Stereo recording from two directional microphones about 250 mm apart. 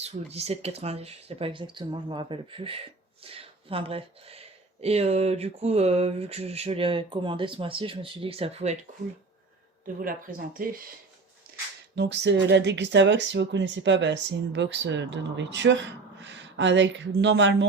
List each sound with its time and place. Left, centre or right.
0.0 s speech: right
9.8 s speech: right
11.9 s speech: right